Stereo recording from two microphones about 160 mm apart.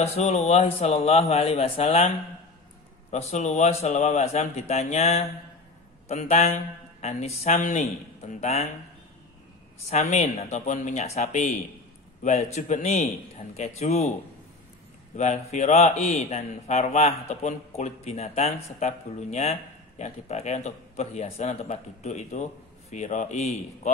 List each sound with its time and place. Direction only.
0.0 s a man's voice: 40° left (ahead or behind)
9.8 s a man's voice: 45° left (ahead or behind)
15.1 s a man's voice: 50° left (ahead or behind)